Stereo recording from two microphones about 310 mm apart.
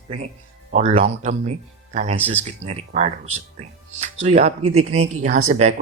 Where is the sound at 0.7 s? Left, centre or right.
Right.